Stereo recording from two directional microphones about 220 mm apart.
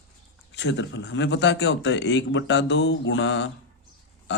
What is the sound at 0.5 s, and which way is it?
Speech, 55° left (ahead or behind).